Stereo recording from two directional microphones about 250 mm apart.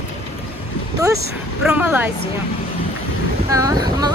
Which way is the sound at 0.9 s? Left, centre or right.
Centre.